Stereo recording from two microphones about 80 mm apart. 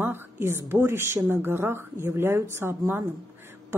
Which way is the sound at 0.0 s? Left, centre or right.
Right.